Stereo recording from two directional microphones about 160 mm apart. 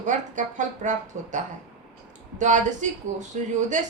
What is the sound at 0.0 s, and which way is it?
A woman's voice, 50° right (ahead or behind).